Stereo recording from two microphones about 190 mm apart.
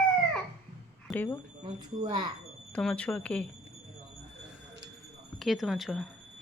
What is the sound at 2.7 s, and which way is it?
Speech, 5° left (ahead or behind).